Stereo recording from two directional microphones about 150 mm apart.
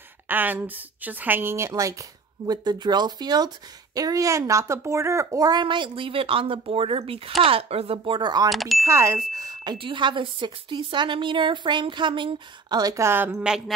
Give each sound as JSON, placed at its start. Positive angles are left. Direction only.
{"t": 0.3, "sound": "a woman's voice", "side_deg": -10}
{"t": 8.5, "sound": "speech", "side_deg": 0}
{"t": 8.8, "sound": "a woman's voice", "side_deg": -20}